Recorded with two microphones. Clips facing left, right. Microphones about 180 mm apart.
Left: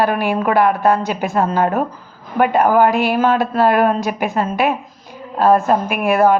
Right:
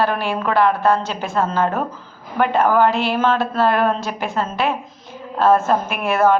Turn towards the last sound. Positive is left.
turn(degrees=15)  # may be behind; listen again after turning